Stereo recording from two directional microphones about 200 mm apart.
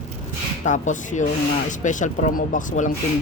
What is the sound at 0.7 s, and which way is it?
Speech, 40° left (ahead or behind).